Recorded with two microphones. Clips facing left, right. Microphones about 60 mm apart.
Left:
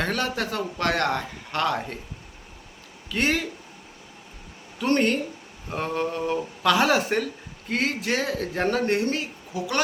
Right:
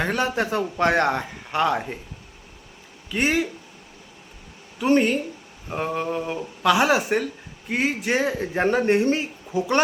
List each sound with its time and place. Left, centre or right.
0.0 s speech: centre
3.1 s speech: centre
4.8 s speech: centre; by 9.8 s right